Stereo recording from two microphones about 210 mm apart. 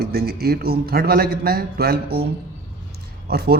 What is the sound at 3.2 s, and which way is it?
Speech, 45° right (ahead or behind).